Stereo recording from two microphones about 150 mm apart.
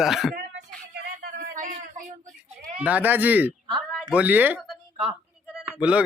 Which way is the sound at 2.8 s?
10° right (ahead or behind).